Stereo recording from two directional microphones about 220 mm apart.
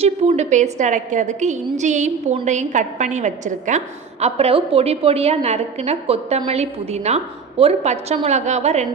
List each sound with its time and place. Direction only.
0.0 s a woman's voice: 30° right (ahead or behind)